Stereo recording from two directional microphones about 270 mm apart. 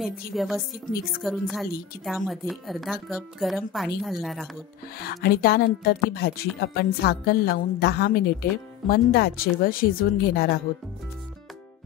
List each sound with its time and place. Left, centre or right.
0.0 s speech: centre
5.0 s a woman's voice: left